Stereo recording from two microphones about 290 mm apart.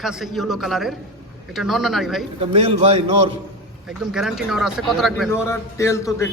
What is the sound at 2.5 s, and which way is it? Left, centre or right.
Speech, centre.